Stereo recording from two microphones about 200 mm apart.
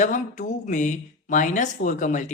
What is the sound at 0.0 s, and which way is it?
Speech, 40° left (ahead or behind).